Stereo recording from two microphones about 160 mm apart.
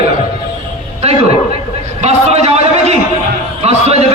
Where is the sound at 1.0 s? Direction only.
40° right (ahead or behind).